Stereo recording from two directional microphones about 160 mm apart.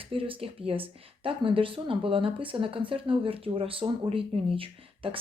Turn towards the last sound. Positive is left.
turn(degrees=-35)  # may be behind; listen again after turning